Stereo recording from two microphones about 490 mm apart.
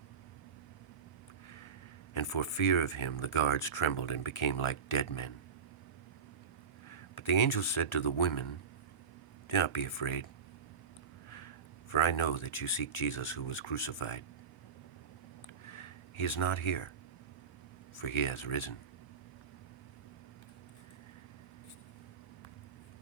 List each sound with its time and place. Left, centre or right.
2.1 s speech: left
6.9 s speech: left
11.9 s speech: left
15.6 s a sound: left
17.9 s speech: left